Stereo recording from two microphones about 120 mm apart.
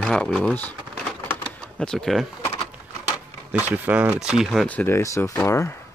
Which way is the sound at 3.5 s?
15° right (ahead or behind).